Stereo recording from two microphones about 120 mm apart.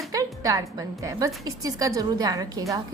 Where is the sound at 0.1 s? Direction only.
30° right (ahead or behind).